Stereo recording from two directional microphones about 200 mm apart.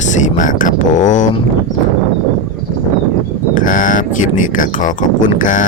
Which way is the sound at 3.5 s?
40° left (ahead or behind).